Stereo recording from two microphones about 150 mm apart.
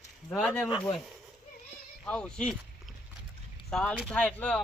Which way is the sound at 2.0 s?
5° left (ahead or behind).